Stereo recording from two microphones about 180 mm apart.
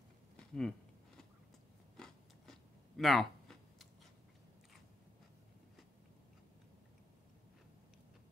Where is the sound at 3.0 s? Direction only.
Centre (ahead or behind).